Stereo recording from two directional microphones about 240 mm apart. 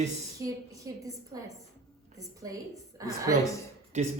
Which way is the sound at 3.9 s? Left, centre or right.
Right.